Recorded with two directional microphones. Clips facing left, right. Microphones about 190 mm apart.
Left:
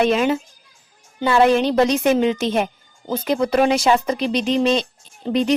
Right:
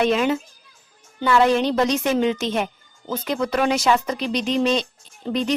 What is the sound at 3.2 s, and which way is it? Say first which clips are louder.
A woman's voice: left 4 dB; 30° left (ahead or behind).